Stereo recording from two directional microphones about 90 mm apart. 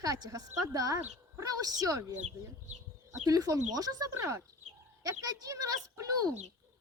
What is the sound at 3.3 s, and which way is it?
Speech, 40° right (ahead or behind).